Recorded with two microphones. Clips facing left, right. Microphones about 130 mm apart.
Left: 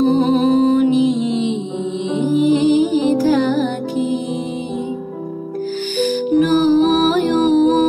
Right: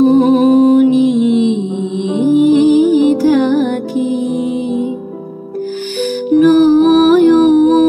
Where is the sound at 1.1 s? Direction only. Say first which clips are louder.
Right 7 dB; 60° right (ahead or behind).